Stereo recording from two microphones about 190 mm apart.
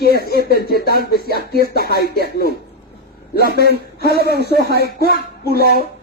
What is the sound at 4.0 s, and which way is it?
Speech, 55° left (ahead or behind).